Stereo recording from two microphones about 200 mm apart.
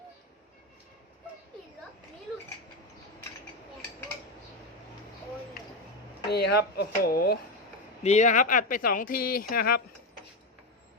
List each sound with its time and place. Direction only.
6.3 s speech: 55° left (ahead or behind)
8.0 s speech: 35° left (ahead or behind)